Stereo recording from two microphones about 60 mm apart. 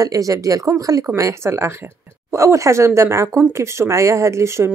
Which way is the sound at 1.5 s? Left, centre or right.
Right.